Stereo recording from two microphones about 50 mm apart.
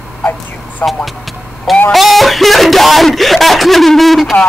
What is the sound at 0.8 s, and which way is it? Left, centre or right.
Speech, left.